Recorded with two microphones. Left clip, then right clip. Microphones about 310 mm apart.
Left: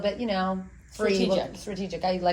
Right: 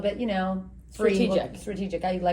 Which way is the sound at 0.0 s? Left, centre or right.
Centre.